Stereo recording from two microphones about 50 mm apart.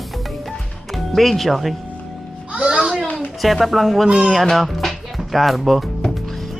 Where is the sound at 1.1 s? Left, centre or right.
Centre.